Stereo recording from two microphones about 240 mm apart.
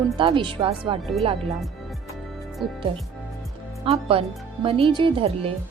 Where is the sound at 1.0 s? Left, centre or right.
Centre.